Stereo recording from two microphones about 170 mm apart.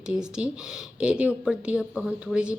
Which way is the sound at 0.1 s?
5° right (ahead or behind).